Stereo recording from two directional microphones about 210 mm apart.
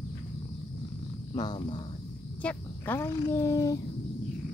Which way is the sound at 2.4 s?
10° left (ahead or behind).